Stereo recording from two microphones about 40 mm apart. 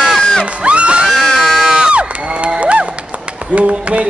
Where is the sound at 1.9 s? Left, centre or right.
Right.